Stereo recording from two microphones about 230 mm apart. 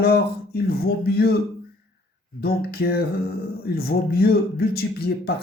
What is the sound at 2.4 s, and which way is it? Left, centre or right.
Speech, left.